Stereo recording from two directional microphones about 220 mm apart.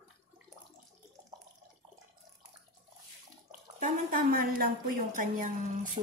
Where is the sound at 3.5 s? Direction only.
40° right (ahead or behind).